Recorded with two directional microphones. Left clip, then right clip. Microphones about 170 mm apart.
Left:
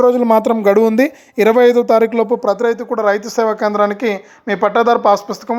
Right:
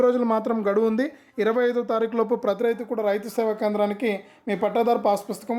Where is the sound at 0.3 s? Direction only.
25° left (ahead or behind).